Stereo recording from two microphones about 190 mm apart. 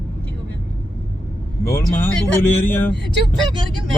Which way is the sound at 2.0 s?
10° left (ahead or behind).